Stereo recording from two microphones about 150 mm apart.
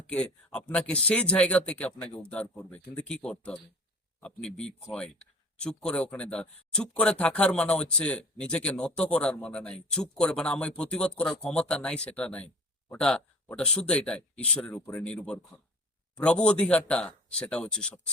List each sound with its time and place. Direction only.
0.1 s speech: 5° left (ahead or behind)